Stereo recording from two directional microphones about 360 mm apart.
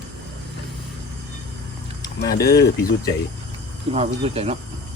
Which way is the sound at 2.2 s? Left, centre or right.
Left.